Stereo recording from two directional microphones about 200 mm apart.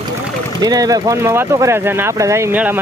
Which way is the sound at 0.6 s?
20° right (ahead or behind).